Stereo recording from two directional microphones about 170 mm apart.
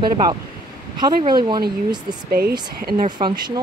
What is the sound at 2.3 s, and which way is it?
Speech, 65° right (ahead or behind).